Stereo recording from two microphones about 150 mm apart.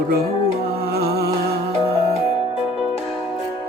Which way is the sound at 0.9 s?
90° right.